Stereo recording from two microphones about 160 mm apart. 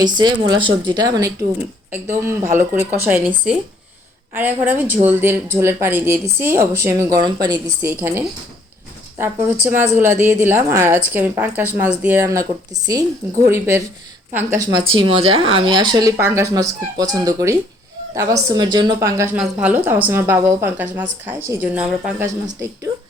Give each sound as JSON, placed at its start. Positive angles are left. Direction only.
{"t": 0.0, "sound": "speech", "side_deg": -30}
{"t": 7.8, "sound": "speech", "side_deg": -15}